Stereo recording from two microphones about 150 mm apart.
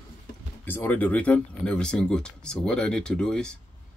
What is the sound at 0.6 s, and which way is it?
Speech, 15° left (ahead or behind).